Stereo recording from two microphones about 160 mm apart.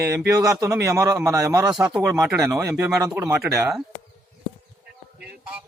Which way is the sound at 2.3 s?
Centre (ahead or behind).